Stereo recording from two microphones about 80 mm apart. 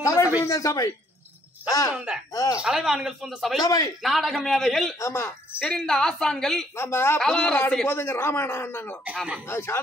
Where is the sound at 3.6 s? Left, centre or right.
Left.